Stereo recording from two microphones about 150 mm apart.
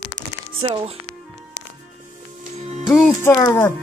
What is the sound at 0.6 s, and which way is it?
Speech, 40° right (ahead or behind).